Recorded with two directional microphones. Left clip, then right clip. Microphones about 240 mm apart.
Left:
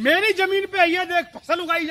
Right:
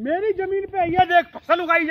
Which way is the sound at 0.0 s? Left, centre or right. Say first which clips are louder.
Left 4 dB; centre.